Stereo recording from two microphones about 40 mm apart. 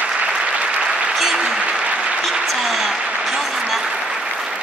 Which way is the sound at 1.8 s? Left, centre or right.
Right.